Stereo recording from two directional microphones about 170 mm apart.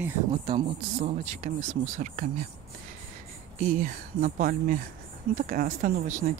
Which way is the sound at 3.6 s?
50° right (ahead or behind).